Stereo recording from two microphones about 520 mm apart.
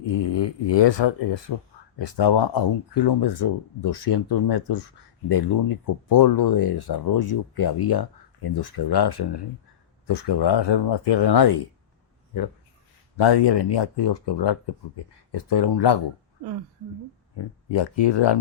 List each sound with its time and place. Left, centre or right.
0.0 s speech: left
13.2 s speech: left
17.7 s speech: left